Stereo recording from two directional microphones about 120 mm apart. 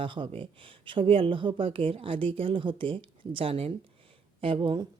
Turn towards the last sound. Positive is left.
turn(degrees=-45)  # may be behind; listen again after turning